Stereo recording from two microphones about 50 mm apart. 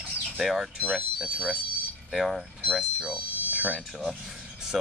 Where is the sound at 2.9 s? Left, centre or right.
Right.